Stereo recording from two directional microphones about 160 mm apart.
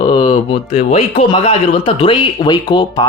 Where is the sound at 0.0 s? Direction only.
30° left (ahead or behind).